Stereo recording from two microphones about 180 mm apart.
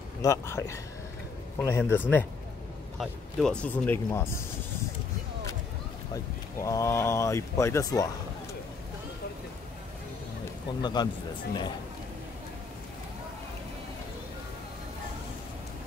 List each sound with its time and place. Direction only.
0.2 s speech: 15° left (ahead or behind)
6.1 s speech: 15° left (ahead or behind)
10.8 s speech: 25° left (ahead or behind)